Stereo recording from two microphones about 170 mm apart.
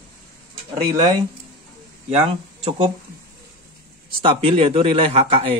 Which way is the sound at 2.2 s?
30° right (ahead or behind).